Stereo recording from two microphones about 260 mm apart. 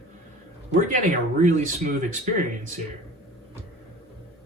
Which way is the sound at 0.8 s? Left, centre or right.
Right.